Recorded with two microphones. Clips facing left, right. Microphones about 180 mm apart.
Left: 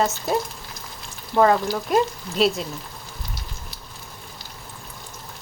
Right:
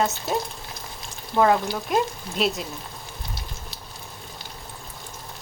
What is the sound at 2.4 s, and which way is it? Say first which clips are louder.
Speech: left 4 dB; centre (ahead or behind).